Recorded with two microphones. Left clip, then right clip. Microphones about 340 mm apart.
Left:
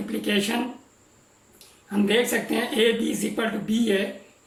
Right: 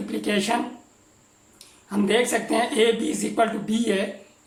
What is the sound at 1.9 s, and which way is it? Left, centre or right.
Speech, centre.